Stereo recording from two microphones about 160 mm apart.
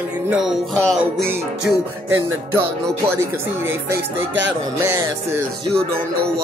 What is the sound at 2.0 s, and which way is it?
Speech, 15° right (ahead or behind).